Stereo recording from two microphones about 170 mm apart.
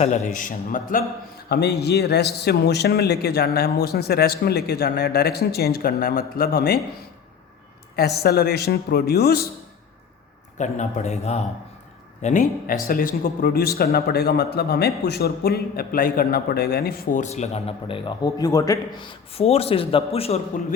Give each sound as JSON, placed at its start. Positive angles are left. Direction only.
{"t": 0.0, "sound": "a man's voice", "side_deg": 50}
{"t": 1.5, "sound": "a man's voice", "side_deg": 75}
{"t": 7.9, "sound": "speech", "side_deg": 65}
{"t": 10.6, "sound": "a man's voice", "side_deg": 40}
{"t": 19.3, "sound": "a man's voice", "side_deg": 35}